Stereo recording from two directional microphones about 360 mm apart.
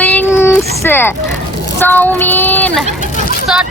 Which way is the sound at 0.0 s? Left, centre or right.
Centre.